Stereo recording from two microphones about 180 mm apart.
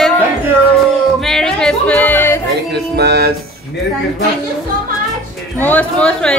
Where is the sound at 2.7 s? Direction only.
65° right (ahead or behind).